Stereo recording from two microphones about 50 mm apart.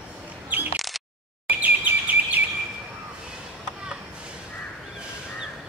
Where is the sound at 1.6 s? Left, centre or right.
Right.